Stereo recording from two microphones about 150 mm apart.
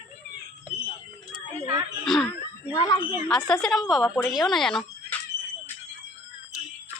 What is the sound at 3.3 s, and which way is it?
A woman's voice, 5° left (ahead or behind).